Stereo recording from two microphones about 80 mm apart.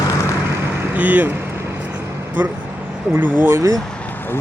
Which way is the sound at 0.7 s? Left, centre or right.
Right.